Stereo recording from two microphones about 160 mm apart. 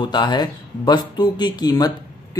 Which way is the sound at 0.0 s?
30° left (ahead or behind).